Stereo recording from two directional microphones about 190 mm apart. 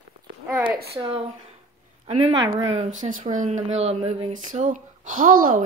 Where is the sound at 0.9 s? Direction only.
30° right (ahead or behind).